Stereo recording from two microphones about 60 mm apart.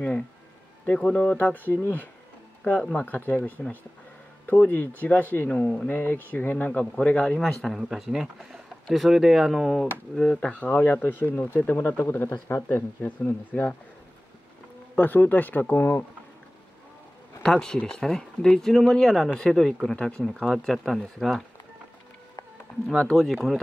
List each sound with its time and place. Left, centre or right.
0.9 s speech: left
5.5 s speech: centre
5.9 s speech: left
7.3 s speech: centre
7.9 s speech: centre
10.2 s speech: centre
10.6 s speech: left
13.2 s speech: left
15.0 s speech: left
17.4 s speech: centre
20.2 s speech: centre
23.1 s speech: centre